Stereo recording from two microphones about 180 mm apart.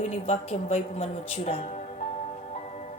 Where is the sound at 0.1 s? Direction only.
35° left (ahead or behind).